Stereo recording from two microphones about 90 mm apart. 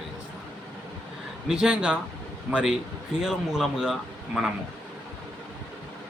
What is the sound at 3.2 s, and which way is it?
A man's voice, 5° right (ahead or behind).